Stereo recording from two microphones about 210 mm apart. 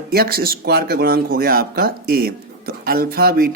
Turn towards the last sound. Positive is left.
turn(degrees=-45)  # may be behind; listen again after turning